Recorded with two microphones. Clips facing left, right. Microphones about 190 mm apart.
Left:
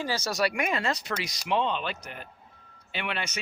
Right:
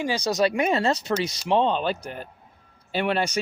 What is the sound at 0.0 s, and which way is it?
Speech, 15° right (ahead or behind).